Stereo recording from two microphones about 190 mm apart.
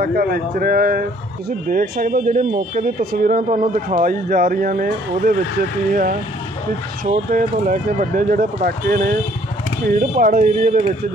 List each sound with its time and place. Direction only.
0.0 s speech: 50° right (ahead or behind)
3.0 s speech: 50° right (ahead or behind)
7.1 s speech: 45° right (ahead or behind)